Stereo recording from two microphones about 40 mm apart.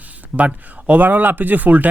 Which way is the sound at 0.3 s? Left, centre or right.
Right.